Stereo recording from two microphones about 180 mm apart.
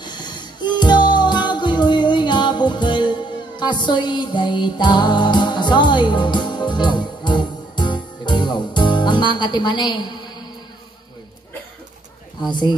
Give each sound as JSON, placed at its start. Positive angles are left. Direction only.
{"t": 0.0, "sound": "music", "side_deg": 25}
{"t": 12.4, "sound": "speech", "side_deg": 25}